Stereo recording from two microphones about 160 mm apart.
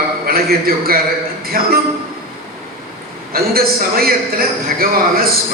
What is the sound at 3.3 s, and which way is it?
A man's voice, 70° right (ahead or behind).